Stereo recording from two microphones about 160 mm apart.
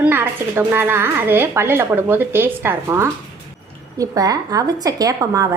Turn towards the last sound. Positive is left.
turn(degrees=-20)  # may be behind; listen again after turning